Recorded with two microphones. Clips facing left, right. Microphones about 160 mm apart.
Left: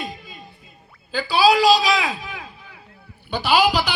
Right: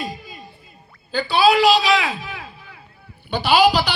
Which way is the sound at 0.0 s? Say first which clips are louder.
Right 2 dB; centre (ahead or behind).